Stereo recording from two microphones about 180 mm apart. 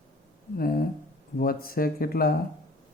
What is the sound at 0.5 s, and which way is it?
Speech, 55° left (ahead or behind).